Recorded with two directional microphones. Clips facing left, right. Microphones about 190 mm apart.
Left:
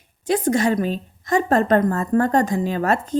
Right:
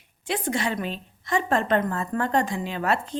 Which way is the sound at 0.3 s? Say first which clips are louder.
Left 8 dB; 40° left (ahead or behind).